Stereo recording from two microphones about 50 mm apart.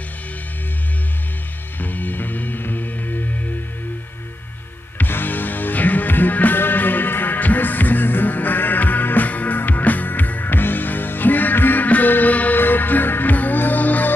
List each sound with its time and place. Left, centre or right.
1.8 s music: left
4.9 s music: left